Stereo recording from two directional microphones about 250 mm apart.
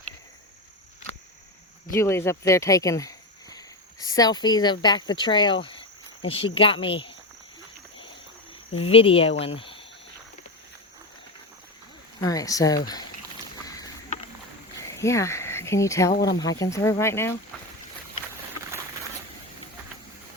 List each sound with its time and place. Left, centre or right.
1.9 s speech: centre
8.8 s speech: left
9.6 s cricket: left
12.2 s speech: centre
13.7 s a sound: centre
14.8 s speech: centre